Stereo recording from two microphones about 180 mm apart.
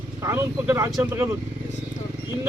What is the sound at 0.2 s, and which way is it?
Speech, 15° right (ahead or behind).